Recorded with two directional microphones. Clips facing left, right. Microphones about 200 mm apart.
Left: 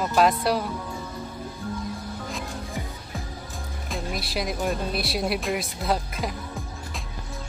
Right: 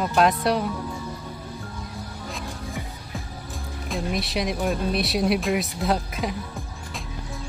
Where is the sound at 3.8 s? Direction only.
Centre (ahead or behind).